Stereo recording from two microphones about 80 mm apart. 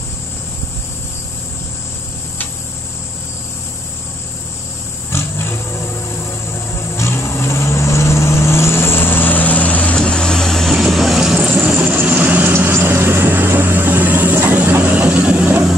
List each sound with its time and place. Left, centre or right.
5.1 s roaring cats: left
7.0 s vehicle: left; by 11.3 s centre
11.5 s vehicle: centre